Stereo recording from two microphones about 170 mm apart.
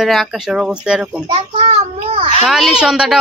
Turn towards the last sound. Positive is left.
turn(degrees=-5)  # may be behind; listen again after turning